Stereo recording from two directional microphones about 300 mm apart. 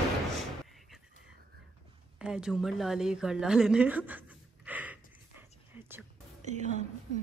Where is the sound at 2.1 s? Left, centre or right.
Centre.